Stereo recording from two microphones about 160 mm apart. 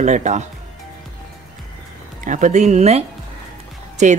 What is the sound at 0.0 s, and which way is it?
Speech, 50° right (ahead or behind).